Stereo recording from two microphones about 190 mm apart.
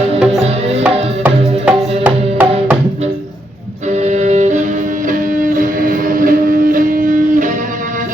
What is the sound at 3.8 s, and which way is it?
Music, 35° right (ahead or behind).